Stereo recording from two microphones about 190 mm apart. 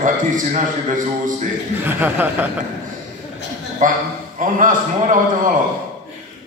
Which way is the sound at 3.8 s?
45° right (ahead or behind).